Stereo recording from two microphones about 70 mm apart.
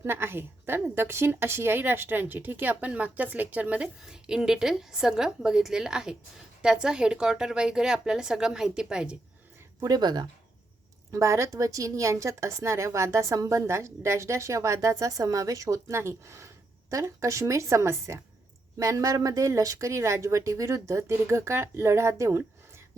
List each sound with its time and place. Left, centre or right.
0.0 s a woman's voice: right
4.0 s speech: centre
9.8 s speech: right
11.1 s a woman's voice: right